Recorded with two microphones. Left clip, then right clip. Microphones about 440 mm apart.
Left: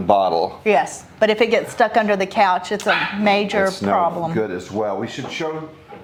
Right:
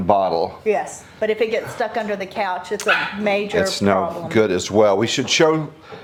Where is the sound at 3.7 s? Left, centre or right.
Right.